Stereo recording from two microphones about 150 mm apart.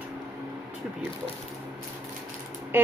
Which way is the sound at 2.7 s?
15° right (ahead or behind).